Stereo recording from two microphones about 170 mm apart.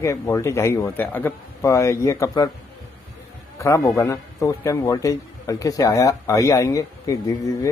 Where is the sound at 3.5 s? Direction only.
20° left (ahead or behind).